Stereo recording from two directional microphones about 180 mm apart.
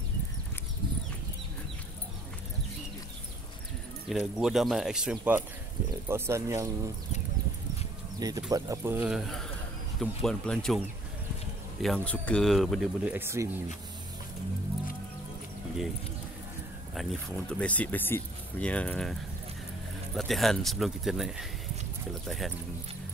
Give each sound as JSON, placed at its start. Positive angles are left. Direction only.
{"t": 4.2, "sound": "speech", "side_deg": -5}
{"t": 8.2, "sound": "speech", "side_deg": -20}
{"t": 11.8, "sound": "speech", "side_deg": 5}
{"t": 13.1, "sound": "speech", "side_deg": -15}
{"t": 16.9, "sound": "speech", "side_deg": 5}
{"t": 20.2, "sound": "speech", "side_deg": 0}